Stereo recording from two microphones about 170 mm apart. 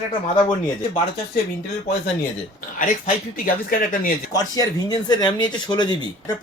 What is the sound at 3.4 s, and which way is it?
Speech, 55° left (ahead or behind).